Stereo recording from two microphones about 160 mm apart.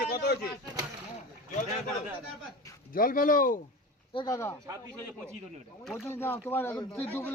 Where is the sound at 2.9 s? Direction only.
60° left (ahead or behind).